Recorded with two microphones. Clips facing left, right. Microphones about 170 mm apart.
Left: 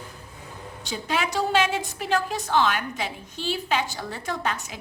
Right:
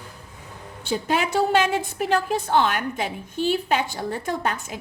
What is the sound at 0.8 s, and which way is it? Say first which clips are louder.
A woman's voice: right 4 dB; 55° right (ahead or behind).